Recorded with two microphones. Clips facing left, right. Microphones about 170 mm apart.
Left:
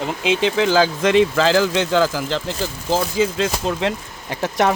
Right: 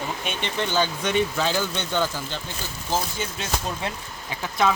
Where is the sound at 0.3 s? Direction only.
90° left.